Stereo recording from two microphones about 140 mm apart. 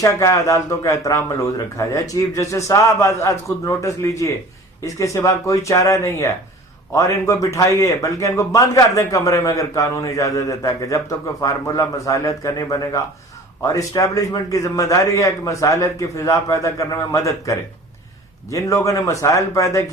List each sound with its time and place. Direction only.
0.0 s a man's voice: 25° left (ahead or behind)